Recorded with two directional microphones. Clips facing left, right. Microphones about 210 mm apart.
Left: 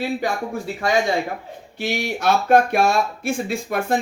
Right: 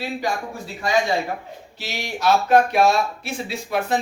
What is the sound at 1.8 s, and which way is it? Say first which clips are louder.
Speech: left 3 dB; 55° left (ahead or behind).